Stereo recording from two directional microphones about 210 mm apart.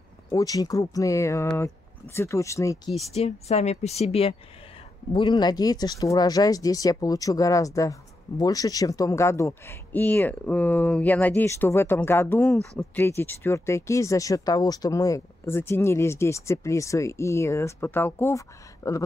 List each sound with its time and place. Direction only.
0.3 s speech: 15° left (ahead or behind)
3.1 s speech: 30° left (ahead or behind); by 19.0 s 15° left (ahead or behind)